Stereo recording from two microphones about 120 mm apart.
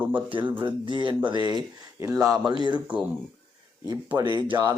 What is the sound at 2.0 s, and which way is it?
Speech, 25° right (ahead or behind).